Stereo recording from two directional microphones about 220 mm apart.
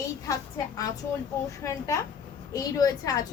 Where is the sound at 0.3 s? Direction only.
15° left (ahead or behind).